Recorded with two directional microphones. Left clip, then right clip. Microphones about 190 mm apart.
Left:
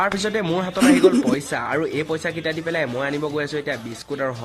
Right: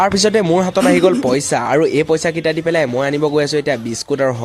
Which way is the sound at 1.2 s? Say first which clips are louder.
Right 7 dB; 45° right (ahead or behind).